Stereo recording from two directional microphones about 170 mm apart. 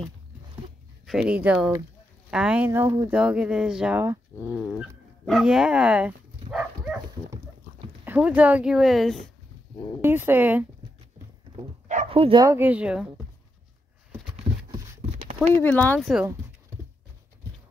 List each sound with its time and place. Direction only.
1.0 s speech: 5° right (ahead or behind)
3.2 s speech: 5° right (ahead or behind)
5.2 s dog: centre (ahead or behind)
8.0 s speech: 10° right (ahead or behind)
10.0 s speech: 10° right (ahead or behind)
12.1 s speech: 30° right (ahead or behind)
12.4 s speech: 10° right (ahead or behind)
14.5 s a sound: 30° right (ahead or behind)
15.3 s speech: 10° left (ahead or behind)